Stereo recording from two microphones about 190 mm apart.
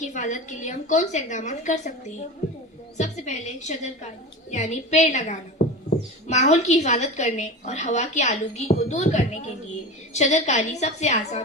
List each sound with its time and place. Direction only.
0.0 s a woman's voice: 40° left (ahead or behind)
3.0 s a woman's voice: 40° left (ahead or behind)